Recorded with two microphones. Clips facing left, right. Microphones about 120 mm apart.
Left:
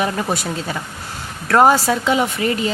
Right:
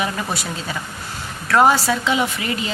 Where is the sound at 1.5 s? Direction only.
45° left (ahead or behind).